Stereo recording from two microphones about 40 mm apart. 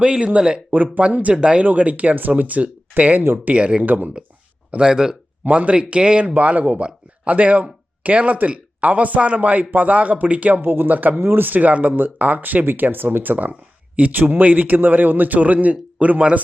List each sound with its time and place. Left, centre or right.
0.0 s speech: right
0.9 s speech: right
1.4 s speech: right
1.6 s speech: right
3.8 s speech: right
4.8 s speech: centre
5.5 s speech: right
10.6 s speech: right
11.2 s speech: right